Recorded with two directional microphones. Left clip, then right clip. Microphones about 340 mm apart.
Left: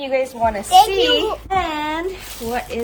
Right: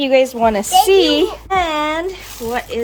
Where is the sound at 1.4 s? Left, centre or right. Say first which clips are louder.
Right 4 dB; centre.